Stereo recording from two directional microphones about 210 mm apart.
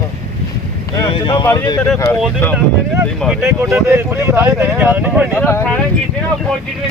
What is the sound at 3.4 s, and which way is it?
Speech, 10° right (ahead or behind).